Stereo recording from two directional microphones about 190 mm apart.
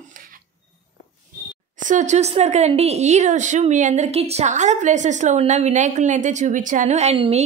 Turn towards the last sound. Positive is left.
turn(degrees=-30)  # may be behind; listen again after turning